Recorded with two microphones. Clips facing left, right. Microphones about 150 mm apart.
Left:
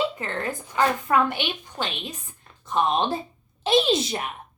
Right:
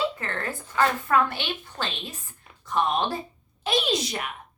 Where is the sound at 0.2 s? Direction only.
20° left (ahead or behind).